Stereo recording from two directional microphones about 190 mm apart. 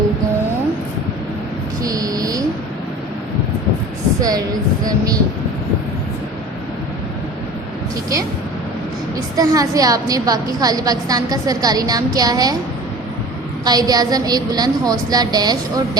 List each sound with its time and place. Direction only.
1.8 s a sound: 20° right (ahead or behind)
4.2 s a woman's voice: 20° right (ahead or behind)
9.1 s a woman's voice: 20° right (ahead or behind)
13.7 s a woman's voice: 20° right (ahead or behind)